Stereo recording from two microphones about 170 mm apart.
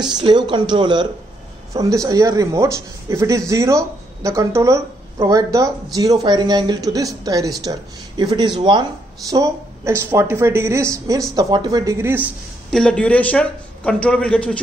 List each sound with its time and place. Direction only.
0.0 s speech: 25° right (ahead or behind)
12.7 s a man's voice: 5° left (ahead or behind)